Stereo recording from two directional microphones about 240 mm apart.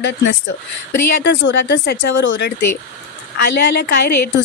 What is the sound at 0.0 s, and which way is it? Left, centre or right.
A woman's voice, left.